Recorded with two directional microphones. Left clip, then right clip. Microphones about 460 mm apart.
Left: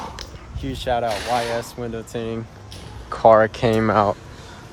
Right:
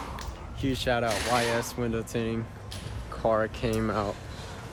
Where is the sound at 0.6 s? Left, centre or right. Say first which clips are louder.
Left 5 dB; centre.